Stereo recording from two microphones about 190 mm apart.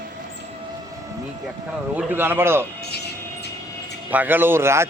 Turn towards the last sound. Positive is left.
turn(degrees=-15)  # may be behind; listen again after turning